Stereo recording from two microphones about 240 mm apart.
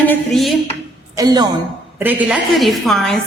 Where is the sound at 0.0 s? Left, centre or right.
Centre.